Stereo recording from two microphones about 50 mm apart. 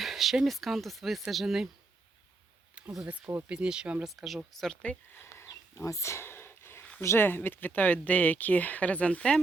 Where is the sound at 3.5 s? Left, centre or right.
Centre.